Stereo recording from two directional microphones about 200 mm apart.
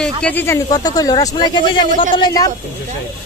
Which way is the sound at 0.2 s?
10° left (ahead or behind).